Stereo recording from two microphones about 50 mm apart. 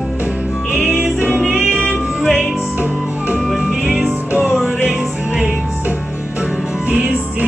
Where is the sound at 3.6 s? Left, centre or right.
Centre.